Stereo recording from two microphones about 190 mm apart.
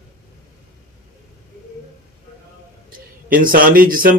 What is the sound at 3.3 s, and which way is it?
Speech, 50° right (ahead or behind).